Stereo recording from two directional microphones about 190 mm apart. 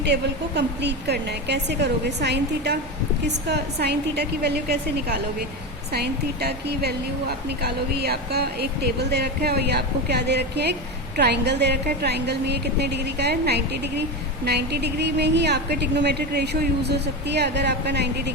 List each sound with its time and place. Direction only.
0.0 s speech: 60° right (ahead or behind)